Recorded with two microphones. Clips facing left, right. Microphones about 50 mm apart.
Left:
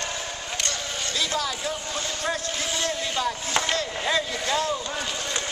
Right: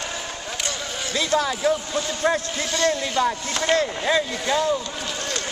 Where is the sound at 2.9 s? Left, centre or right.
Right.